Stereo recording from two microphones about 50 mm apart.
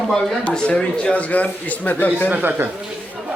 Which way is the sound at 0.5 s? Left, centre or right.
Left.